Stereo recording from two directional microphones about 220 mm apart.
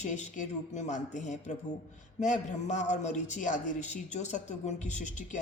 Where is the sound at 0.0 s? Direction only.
35° left (ahead or behind).